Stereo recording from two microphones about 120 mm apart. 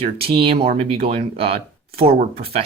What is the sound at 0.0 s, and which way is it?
Speech, 50° right (ahead or behind).